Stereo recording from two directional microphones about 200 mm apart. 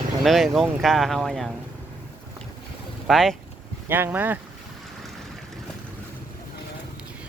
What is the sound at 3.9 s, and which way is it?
Speech, 10° right (ahead or behind).